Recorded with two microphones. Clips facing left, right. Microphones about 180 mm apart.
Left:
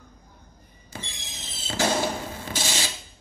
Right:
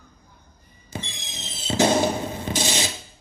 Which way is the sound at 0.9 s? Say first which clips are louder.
Right 5 dB; 20° right (ahead or behind).